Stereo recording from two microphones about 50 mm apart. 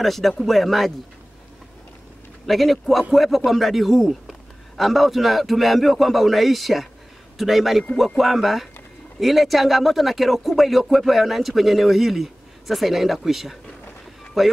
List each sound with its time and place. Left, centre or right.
0.0 s a man's voice: centre
2.4 s a man's voice: centre